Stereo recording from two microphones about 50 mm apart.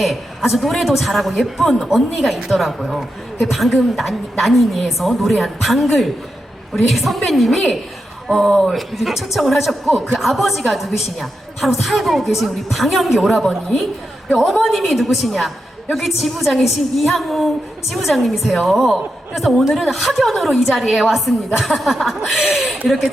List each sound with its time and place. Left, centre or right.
0.0 s a woman's voice: centre